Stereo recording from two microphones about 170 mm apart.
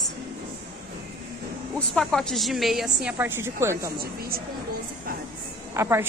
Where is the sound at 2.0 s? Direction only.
Centre (ahead or behind); by 3.9 s 15° right (ahead or behind).